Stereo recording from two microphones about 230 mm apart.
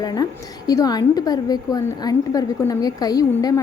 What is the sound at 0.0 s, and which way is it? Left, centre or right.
A woman's voice, centre.